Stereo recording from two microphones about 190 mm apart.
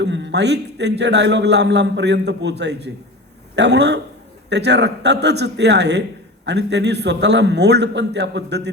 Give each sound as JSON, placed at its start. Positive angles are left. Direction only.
{"t": 0.0, "sound": "a man's voice", "side_deg": -70}